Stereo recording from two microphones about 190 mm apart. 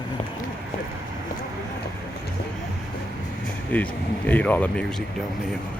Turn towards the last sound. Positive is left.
turn(degrees=5)  # may be behind; listen again after turning